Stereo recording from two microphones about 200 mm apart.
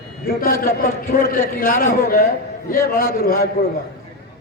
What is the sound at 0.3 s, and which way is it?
A man's voice, 45° left (ahead or behind).